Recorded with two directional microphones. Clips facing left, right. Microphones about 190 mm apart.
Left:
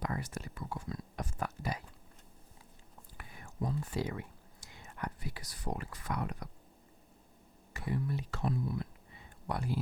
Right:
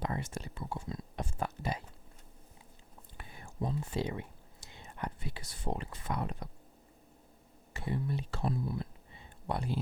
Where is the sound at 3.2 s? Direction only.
30° right (ahead or behind).